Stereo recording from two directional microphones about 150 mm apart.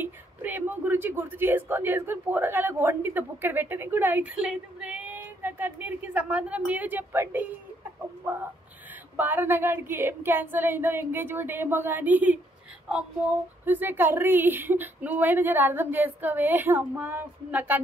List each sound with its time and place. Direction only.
0.0 s speech: 10° right (ahead or behind)
13.7 s speech: 15° right (ahead or behind)